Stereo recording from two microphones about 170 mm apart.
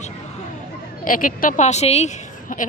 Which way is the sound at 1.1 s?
55° left (ahead or behind).